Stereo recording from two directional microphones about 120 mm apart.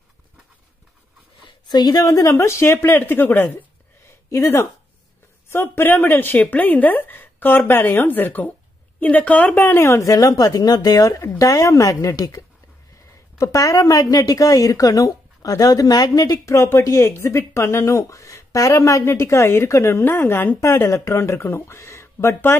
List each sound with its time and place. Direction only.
1.7 s a woman's voice: 35° left (ahead or behind); by 3.5 s 15° left (ahead or behind)
4.0 s a sound: 20° left (ahead or behind)
5.5 s a woman's voice: 15° left (ahead or behind)